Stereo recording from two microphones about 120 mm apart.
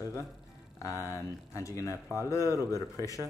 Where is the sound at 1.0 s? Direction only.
25° left (ahead or behind).